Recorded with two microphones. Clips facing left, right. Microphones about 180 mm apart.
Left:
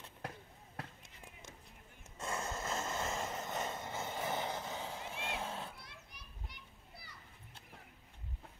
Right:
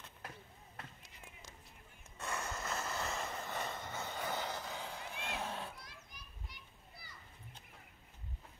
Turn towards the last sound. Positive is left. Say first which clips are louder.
# left 1 dB
turn(degrees=65)  # may be behind; listen again after turning